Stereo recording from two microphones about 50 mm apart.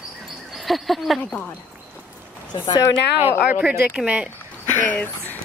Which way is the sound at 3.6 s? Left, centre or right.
Right.